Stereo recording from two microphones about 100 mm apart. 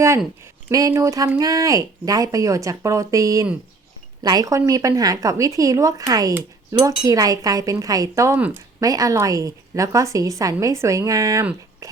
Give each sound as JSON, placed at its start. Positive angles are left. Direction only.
{"t": 0.7, "sound": "a woman's voice", "side_deg": -35}
{"t": 8.4, "sound": "speech", "side_deg": -15}
{"t": 8.8, "sound": "a woman's voice", "side_deg": -35}